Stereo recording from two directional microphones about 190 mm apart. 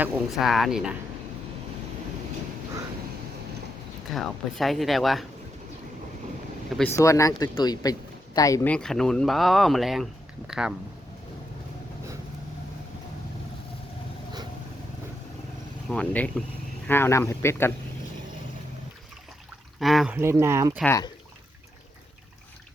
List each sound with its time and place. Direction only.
0.0 s speech: centre (ahead or behind)
4.1 s speech: centre (ahead or behind)
6.7 s speech: 10° left (ahead or behind)
8.7 s speech: centre (ahead or behind)
15.9 s speech: 5° left (ahead or behind)
19.8 s speech: centre (ahead or behind)
20.1 s speech: 10° right (ahead or behind)
20.8 s speech: 15° left (ahead or behind)